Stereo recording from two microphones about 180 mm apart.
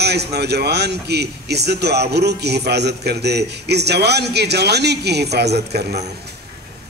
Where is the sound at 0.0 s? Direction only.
65° right (ahead or behind).